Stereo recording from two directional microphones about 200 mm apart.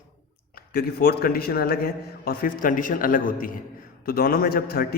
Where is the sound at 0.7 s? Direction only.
50° left (ahead or behind).